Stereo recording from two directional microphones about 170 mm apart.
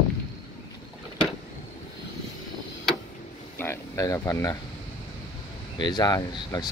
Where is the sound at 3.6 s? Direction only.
15° left (ahead or behind).